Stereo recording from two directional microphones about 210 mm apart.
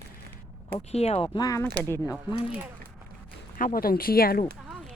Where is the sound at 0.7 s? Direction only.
30° left (ahead or behind).